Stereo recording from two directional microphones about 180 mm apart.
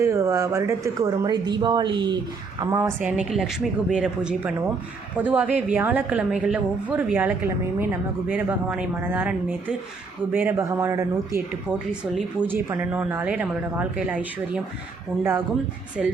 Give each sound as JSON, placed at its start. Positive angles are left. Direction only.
{"t": 0.0, "sound": "speech", "side_deg": -15}
{"t": 2.6, "sound": "a woman's voice", "side_deg": -15}
{"t": 16.0, "sound": "speech", "side_deg": 0}